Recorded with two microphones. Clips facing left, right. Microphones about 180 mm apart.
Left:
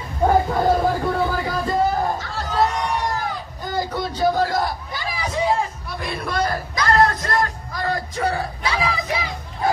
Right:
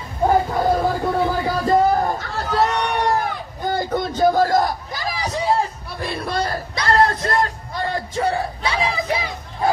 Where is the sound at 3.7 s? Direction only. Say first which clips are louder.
Right 1 dB; 50° right (ahead or behind).